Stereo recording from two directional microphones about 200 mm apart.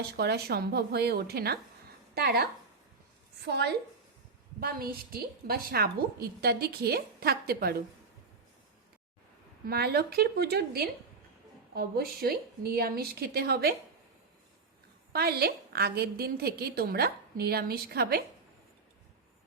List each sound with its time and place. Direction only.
0.2 s a woman's voice: 55° right (ahead or behind)
9.6 s a woman's voice: 50° right (ahead or behind)
15.1 s a woman's voice: 50° right (ahead or behind)